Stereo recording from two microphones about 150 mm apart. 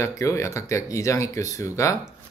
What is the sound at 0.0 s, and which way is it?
Speech, 20° left (ahead or behind).